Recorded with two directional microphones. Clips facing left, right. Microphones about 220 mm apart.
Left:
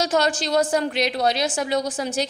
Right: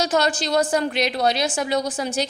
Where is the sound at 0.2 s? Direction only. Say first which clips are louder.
Even; 45° left (ahead or behind).